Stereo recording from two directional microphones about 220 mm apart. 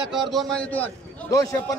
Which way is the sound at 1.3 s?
15° left (ahead or behind).